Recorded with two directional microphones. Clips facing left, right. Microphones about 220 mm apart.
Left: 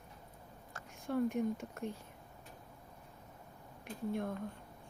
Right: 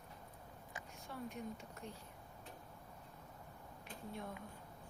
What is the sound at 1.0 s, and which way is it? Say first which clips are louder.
Speech: left 14 dB; 50° left (ahead or behind).